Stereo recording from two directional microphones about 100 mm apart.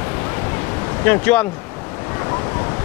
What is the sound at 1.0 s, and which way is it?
Speech, 20° left (ahead or behind).